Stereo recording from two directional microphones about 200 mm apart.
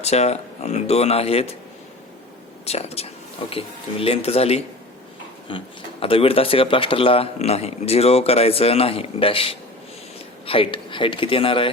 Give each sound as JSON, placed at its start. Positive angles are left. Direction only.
{"t": 0.0, "sound": "speech", "side_deg": 30}
{"t": 2.6, "sound": "speech", "side_deg": 30}